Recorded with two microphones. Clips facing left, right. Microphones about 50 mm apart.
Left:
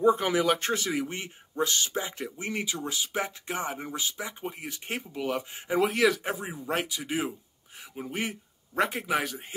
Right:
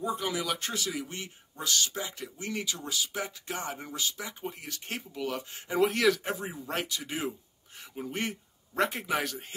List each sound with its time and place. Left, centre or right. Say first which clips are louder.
0.0 s speech: left 8 dB; left; by 5.8 s centre
5.8 s speech: left 1 dB; centre